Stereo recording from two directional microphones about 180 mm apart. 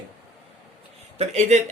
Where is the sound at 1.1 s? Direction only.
35° right (ahead or behind).